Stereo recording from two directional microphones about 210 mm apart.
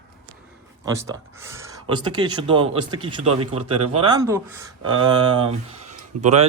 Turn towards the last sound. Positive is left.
turn(degrees=-30)  # may be behind; listen again after turning